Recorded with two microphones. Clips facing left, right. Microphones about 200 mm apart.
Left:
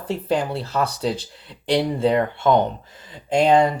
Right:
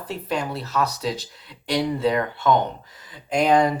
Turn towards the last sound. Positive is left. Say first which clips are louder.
# left 2 dB
turn(degrees=25)  # may be behind; listen again after turning